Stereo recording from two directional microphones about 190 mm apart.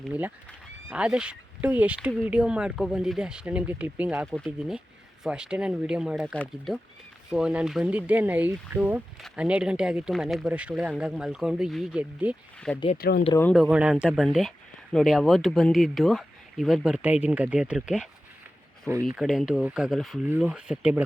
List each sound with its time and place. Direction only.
0.1 s speech: 10° right (ahead or behind)
13.0 s speech: 55° left (ahead or behind)
13.5 s speech: 5° right (ahead or behind)